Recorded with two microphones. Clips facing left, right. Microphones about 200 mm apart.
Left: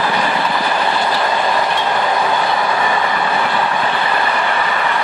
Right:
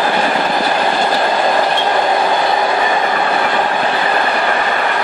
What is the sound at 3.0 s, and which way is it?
Train, 45° right (ahead or behind).